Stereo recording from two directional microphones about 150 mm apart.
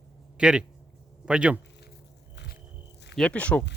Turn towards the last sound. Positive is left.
turn(degrees=10)  # may be behind; listen again after turning